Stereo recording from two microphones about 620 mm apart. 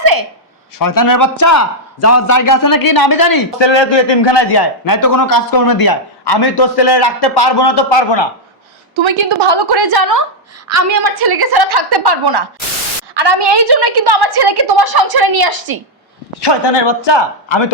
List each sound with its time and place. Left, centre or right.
0.0 s a sound: right
0.8 s a man's voice: left
9.0 s a woman's voice: right
16.4 s a man's voice: left